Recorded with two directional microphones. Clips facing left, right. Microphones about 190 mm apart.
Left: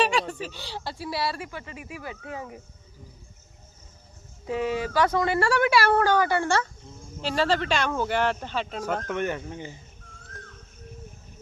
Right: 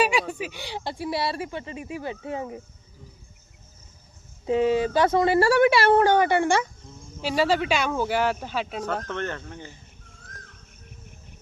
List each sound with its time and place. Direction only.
0.0 s speech: 10° right (ahead or behind); by 2.6 s 25° right (ahead or behind)
4.4 s speech: 20° right (ahead or behind); by 8.8 s 5° right (ahead or behind)
9.0 s speech: 10° left (ahead or behind)